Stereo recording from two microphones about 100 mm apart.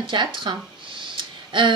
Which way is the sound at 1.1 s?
55° right (ahead or behind).